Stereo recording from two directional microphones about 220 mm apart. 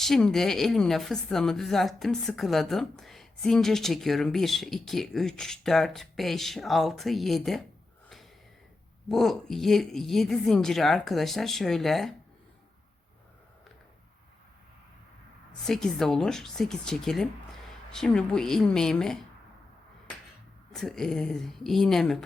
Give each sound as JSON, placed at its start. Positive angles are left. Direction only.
{"t": 0.0, "sound": "a woman's voice", "side_deg": 0}
{"t": 9.0, "sound": "a woman's voice", "side_deg": 0}
{"t": 15.6, "sound": "a woman's voice", "side_deg": 0}
{"t": 20.7, "sound": "a woman's voice", "side_deg": 0}